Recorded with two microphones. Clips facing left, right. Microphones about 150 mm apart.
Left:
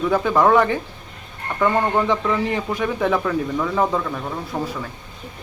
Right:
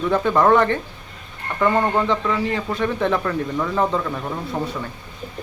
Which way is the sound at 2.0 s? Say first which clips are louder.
Left 1 dB; 15° left (ahead or behind).